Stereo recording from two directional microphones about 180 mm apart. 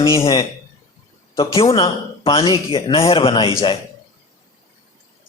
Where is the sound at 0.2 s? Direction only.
30° left (ahead or behind).